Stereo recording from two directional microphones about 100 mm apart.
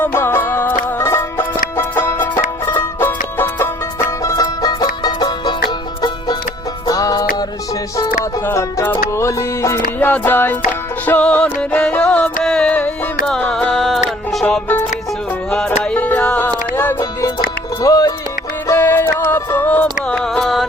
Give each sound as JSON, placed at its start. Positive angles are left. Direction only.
{"t": 0.0, "sound": "music", "side_deg": 25}
{"t": 4.2, "sound": "music", "side_deg": 35}
{"t": 6.8, "sound": "music", "side_deg": 35}
{"t": 8.4, "sound": "music", "side_deg": 20}
{"t": 15.4, "sound": "music", "side_deg": 10}
{"t": 17.8, "sound": "speech", "side_deg": 35}
{"t": 18.7, "sound": "music", "side_deg": 20}